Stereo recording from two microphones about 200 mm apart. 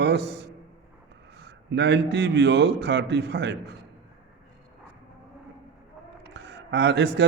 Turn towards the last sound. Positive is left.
turn(degrees=-60)  # may be behind; listen again after turning